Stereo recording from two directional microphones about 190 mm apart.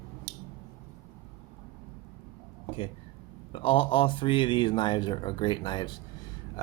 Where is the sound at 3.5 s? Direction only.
30° left (ahead or behind).